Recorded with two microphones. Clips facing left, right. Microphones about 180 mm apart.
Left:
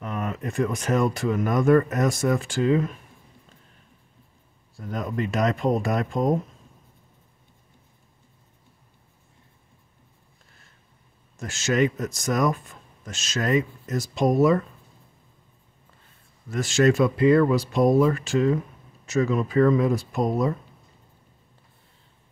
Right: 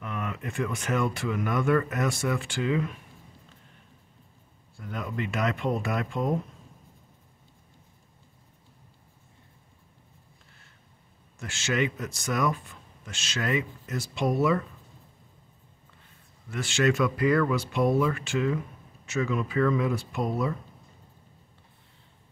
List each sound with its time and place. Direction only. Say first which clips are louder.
0.0 s a man's voice: left 4 dB; 40° left (ahead or behind)
4.7 s a man's voice: left 5 dB; 40° left (ahead or behind)
11.3 s a man's voice: left 5 dB; 40° left (ahead or behind)
16.4 s a man's voice: left 5 dB; 40° left (ahead or behind)